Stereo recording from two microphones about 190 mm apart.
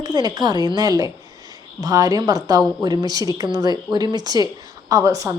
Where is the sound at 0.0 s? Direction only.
20° right (ahead or behind).